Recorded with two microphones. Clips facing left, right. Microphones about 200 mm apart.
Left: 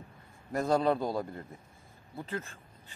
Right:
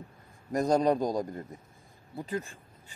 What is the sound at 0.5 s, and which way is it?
Speech, 15° right (ahead or behind).